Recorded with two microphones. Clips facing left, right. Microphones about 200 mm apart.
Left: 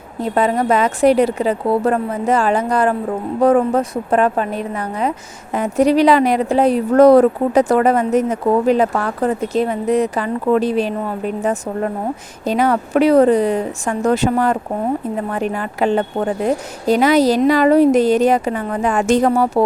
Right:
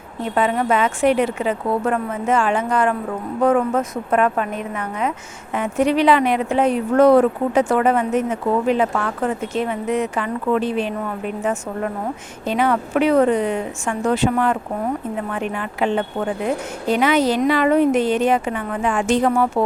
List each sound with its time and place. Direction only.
0.2 s speech: 40° left (ahead or behind)
12.5 s speech: 40° left (ahead or behind)